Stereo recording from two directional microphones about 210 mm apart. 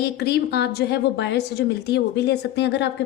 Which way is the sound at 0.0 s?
50° left (ahead or behind).